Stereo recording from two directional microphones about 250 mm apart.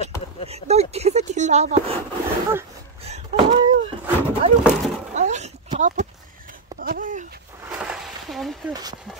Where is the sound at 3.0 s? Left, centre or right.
Right.